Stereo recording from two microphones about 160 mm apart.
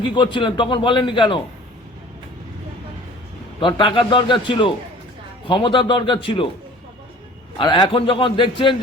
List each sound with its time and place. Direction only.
0.0 s a man's voice: 30° left (ahead or behind)
3.6 s a man's voice: 30° left (ahead or behind)
7.6 s a man's voice: 30° left (ahead or behind)